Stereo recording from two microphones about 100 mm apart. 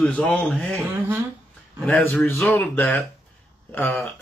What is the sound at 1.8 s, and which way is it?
A man's voice, 15° left (ahead or behind).